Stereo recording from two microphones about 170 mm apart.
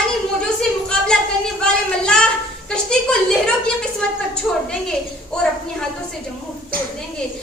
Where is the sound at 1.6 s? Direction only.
5° left (ahead or behind).